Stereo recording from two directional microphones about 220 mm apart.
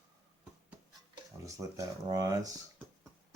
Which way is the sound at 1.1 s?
15° right (ahead or behind).